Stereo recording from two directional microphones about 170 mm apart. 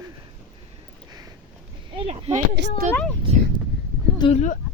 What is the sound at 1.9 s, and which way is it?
Speech, 40° right (ahead or behind).